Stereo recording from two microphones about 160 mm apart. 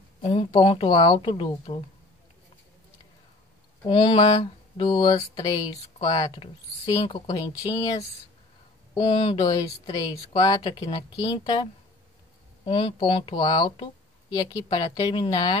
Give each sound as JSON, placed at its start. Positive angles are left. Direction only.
{"t": 0.2, "sound": "speech", "side_deg": 35}
{"t": 3.8, "sound": "speech", "side_deg": 30}
{"t": 8.9, "sound": "speech", "side_deg": 25}
{"t": 10.8, "sound": "speech", "side_deg": 40}
{"t": 11.1, "sound": "speech", "side_deg": 25}
{"t": 12.6, "sound": "speech", "side_deg": 30}